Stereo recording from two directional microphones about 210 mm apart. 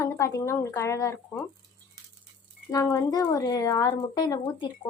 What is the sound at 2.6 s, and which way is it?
Speech, 15° left (ahead or behind).